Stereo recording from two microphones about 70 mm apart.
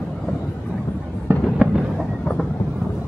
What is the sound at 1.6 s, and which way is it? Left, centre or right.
Fireworks, centre.